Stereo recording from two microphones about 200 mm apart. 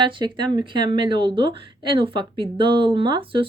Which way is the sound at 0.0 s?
25° right (ahead or behind).